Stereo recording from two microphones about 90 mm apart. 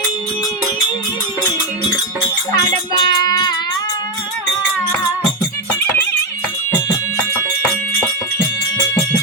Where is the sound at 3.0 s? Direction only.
55° left (ahead or behind).